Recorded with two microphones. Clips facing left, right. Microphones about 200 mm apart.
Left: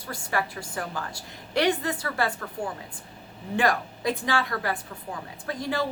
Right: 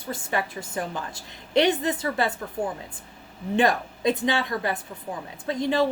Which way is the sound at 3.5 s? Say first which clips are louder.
Right 3 dB; 20° right (ahead or behind).